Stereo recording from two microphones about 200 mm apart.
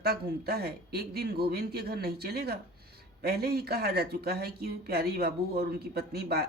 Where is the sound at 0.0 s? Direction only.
50° right (ahead or behind).